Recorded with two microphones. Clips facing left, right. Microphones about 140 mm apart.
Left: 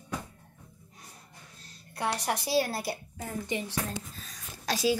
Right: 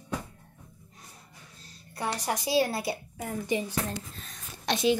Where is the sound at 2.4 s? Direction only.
20° right (ahead or behind).